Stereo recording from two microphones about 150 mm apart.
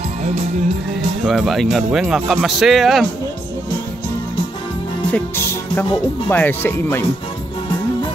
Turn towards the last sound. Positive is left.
turn(degrees=15)  # may be behind; listen again after turning